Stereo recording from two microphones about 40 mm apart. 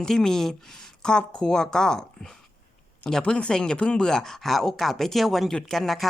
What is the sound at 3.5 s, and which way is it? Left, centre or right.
Speech, centre.